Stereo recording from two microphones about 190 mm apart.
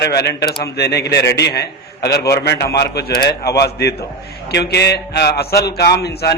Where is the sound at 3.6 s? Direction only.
55° left (ahead or behind).